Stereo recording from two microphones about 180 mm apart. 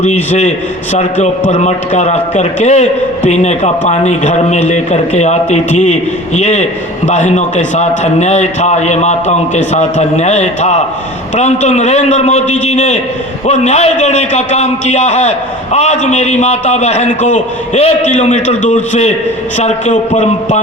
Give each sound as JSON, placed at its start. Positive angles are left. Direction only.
{"t": 0.0, "sound": "a man's voice", "side_deg": 40}